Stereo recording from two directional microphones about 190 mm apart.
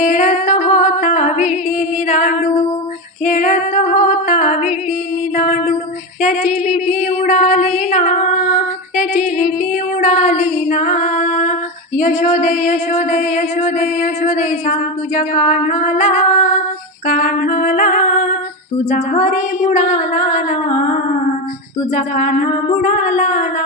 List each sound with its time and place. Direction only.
0.0 s music: 40° left (ahead or behind)
2.0 s female singing: 40° left (ahead or behind)
5.4 s music: 40° left (ahead or behind)
6.2 s a sound: 40° left (ahead or behind)
7.9 s female singing: 40° left (ahead or behind)
11.9 s music: 40° left (ahead or behind)
17.1 s female singing: 45° left (ahead or behind)
18.9 s music: 40° left (ahead or behind)
21.9 s female singing: 40° left (ahead or behind)